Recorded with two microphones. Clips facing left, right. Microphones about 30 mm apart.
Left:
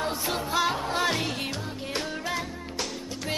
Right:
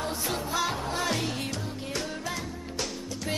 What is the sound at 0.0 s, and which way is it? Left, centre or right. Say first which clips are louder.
Music: left 2 dB; left.